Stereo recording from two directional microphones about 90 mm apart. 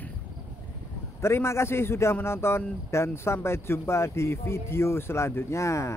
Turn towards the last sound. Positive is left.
turn(degrees=35)  # may be behind; listen again after turning